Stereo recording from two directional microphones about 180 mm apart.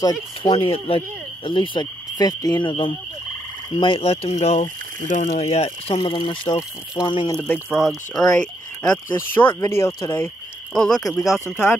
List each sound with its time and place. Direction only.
0.0 s speech: 25° left (ahead or behind)
7.7 s speech: centre (ahead or behind)
8.9 s speech: 10° left (ahead or behind)
10.7 s speech: centre (ahead or behind)